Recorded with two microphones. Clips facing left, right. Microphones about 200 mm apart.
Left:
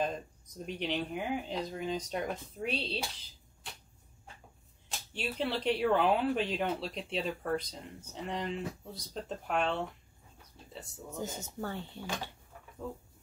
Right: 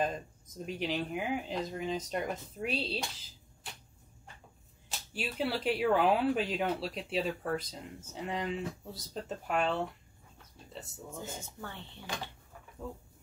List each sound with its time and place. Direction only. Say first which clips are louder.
0.7 s speech: even; centre (ahead or behind)
4.8 s speech: left 1 dB; centre (ahead or behind)
11.2 s speech: left 5 dB; 40° left (ahead or behind)